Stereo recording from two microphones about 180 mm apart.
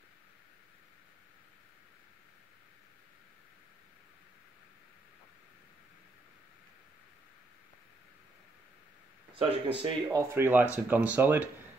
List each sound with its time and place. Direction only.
9.3 s speech: 30° right (ahead or behind)
10.0 s speech: 10° right (ahead or behind)